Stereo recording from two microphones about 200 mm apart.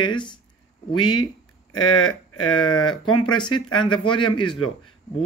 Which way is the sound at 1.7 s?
90° left.